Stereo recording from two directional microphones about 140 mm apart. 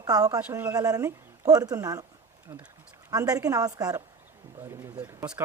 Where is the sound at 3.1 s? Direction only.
25° right (ahead or behind).